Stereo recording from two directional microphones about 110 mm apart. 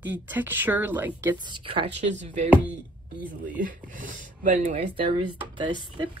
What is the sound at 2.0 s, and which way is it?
Speech, 90° right.